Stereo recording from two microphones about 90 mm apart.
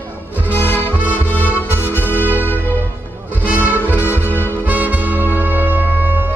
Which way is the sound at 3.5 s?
20° right (ahead or behind).